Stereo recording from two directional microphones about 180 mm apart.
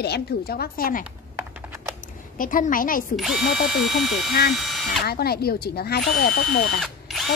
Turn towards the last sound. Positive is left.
turn(degrees=0)  # may be behind; listen again after turning